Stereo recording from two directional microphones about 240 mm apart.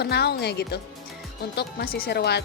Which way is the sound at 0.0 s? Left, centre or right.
Left.